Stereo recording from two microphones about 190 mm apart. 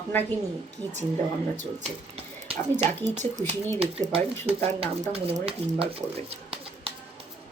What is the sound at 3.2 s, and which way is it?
Speech, 40° right (ahead or behind).